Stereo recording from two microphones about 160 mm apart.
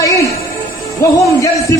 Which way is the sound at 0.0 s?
20° left (ahead or behind).